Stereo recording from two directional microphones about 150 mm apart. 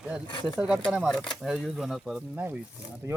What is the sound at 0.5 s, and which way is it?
Speech, 5° right (ahead or behind).